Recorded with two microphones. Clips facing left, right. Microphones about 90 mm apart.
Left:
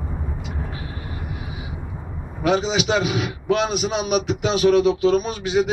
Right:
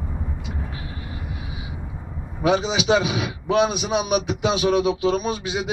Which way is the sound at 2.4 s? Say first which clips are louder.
Even; 15° right (ahead or behind).